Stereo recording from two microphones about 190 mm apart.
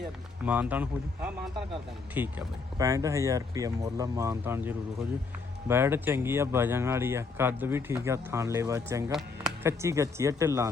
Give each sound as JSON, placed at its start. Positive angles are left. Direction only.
{"t": 0.4, "sound": "speech", "side_deg": -10}